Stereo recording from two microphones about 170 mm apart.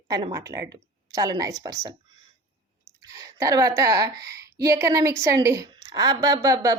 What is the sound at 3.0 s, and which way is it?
A woman's voice, 20° right (ahead or behind).